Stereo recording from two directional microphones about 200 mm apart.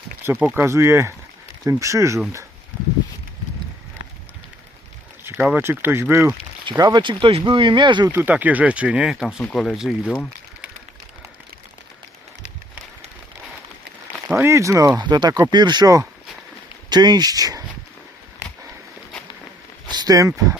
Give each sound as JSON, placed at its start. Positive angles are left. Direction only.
{"t": 0.3, "sound": "speech", "side_deg": -10}
{"t": 5.2, "sound": "speech", "side_deg": -10}
{"t": 8.1, "sound": "speech", "side_deg": -10}
{"t": 14.3, "sound": "speech", "side_deg": -10}
{"t": 19.9, "sound": "speech", "side_deg": -20}